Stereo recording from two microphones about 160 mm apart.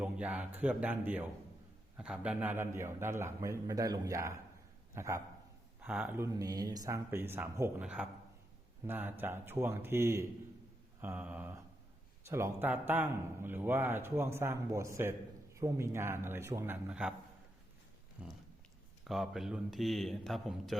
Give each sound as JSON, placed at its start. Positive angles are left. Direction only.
{"t": 0.0, "sound": "a man's voice", "side_deg": -10}
{"t": 18.2, "sound": "a sound", "side_deg": -5}
{"t": 19.0, "sound": "speech", "side_deg": 0}